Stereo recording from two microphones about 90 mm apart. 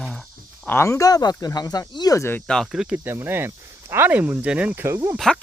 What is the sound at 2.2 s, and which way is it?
Speech, 25° left (ahead or behind).